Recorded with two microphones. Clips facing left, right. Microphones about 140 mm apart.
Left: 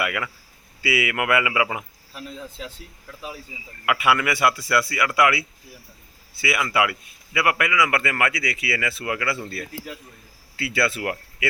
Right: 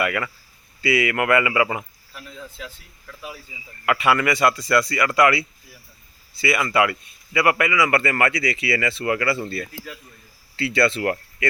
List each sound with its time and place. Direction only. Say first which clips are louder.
0.0 s speech: right 3 dB; 5° left (ahead or behind)
2.1 s speech: left 2 dB; 25° left (ahead or behind)
3.8 s speech: right 2 dB; 5° left (ahead or behind)